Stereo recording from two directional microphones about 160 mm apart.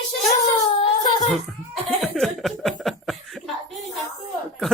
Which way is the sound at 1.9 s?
Centre (ahead or behind).